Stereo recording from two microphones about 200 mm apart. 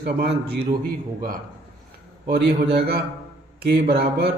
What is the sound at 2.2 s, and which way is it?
A man's voice, 55° right (ahead or behind).